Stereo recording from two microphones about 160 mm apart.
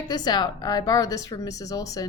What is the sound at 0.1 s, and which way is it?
Speech, 25° left (ahead or behind).